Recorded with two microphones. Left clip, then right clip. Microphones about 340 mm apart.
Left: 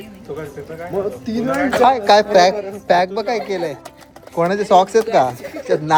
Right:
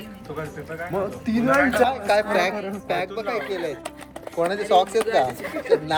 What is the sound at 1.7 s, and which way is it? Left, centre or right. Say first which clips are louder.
Speech: left 8 dB; left.